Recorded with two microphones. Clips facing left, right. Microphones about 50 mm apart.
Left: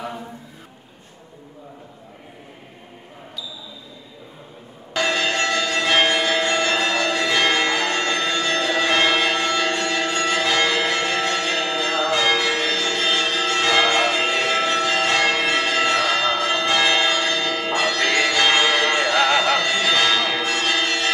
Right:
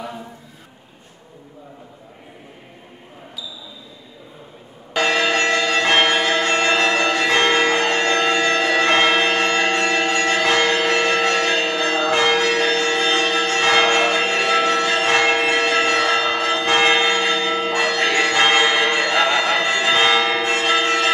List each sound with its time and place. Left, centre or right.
4.9 s church bell: right